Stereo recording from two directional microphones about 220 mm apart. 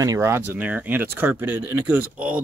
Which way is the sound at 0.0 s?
15° right (ahead or behind).